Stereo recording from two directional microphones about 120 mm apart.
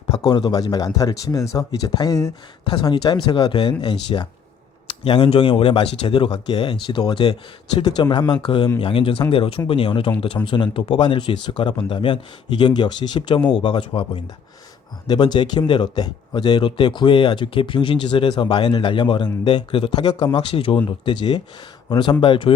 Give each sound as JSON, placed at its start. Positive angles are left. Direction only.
{"t": 0.3, "sound": "speech", "side_deg": 35}
{"t": 7.8, "sound": "speech", "side_deg": 35}
{"t": 15.0, "sound": "speech", "side_deg": 35}
{"t": 20.5, "sound": "speech", "side_deg": 50}